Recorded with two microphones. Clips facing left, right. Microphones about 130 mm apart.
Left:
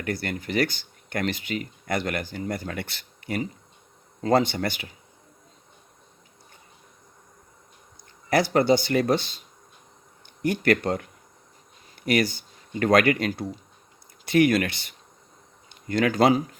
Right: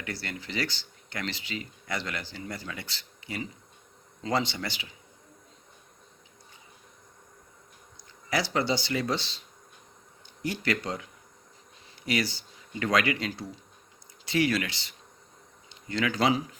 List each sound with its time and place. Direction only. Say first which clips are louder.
0.0 s speech: left 8 dB; 50° left (ahead or behind)
8.3 s speech: left 8 dB; 55° left (ahead or behind)
10.4 s speech: left 8 dB; 55° left (ahead or behind)